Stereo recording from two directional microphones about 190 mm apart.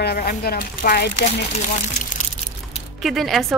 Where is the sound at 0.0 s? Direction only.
55° left (ahead or behind).